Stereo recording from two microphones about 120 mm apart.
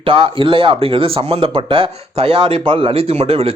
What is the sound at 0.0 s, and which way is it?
Speech, 45° right (ahead or behind).